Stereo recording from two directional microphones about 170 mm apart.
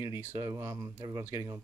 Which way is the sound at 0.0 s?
15° right (ahead or behind).